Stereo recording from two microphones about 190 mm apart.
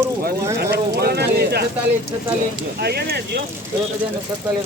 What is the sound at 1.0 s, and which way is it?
Speech, 60° right (ahead or behind).